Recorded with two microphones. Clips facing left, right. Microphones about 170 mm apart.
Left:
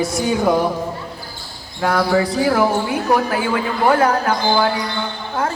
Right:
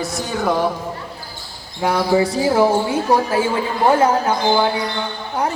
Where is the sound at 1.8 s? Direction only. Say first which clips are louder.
Even; 20° right (ahead or behind).